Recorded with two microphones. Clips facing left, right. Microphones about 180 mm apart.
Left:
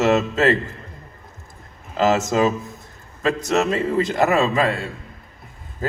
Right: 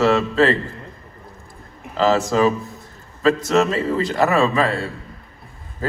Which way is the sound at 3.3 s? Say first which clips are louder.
Right 2 dB; 20° left (ahead or behind).